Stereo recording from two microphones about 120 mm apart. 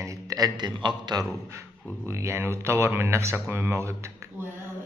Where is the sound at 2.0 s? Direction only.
20° right (ahead or behind).